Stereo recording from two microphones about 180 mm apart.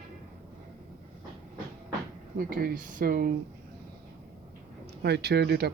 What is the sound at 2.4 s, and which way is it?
Speech, 55° right (ahead or behind).